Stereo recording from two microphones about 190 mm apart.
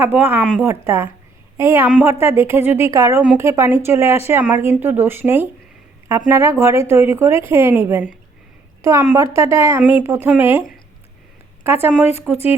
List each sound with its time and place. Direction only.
0.0 s a woman's voice: 10° right (ahead or behind)
11.6 s a woman's voice: 10° right (ahead or behind)